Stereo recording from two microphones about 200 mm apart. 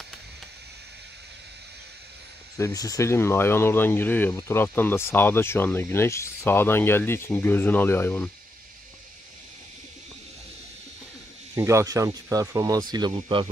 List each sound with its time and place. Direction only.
2.5 s speech: 15° left (ahead or behind)
11.5 s speech: 15° right (ahead or behind)